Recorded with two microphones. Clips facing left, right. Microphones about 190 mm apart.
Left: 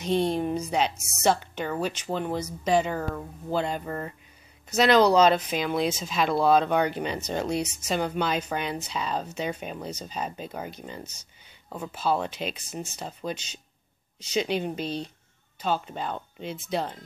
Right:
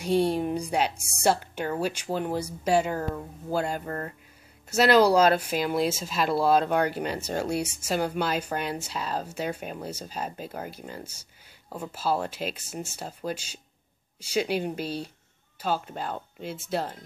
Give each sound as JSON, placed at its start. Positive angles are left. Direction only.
{"t": 0.0, "sound": "speech", "side_deg": -10}
{"t": 3.8, "sound": "speech", "side_deg": 5}
{"t": 4.6, "sound": "speech", "side_deg": -5}